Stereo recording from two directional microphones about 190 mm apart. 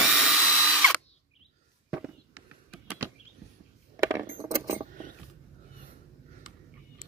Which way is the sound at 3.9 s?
15° right (ahead or behind).